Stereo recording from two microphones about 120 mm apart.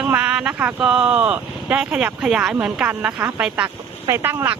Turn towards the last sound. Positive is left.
turn(degrees=-20)  # may be behind; listen again after turning